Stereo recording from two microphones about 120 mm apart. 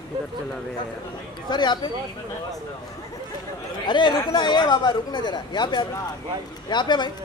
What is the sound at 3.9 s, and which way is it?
Speech, 40° left (ahead or behind).